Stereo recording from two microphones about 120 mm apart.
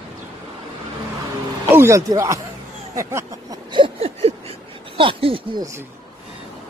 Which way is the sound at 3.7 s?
50° right (ahead or behind).